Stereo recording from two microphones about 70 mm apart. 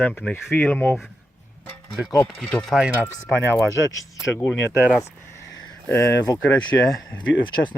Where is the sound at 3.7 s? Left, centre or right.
Right.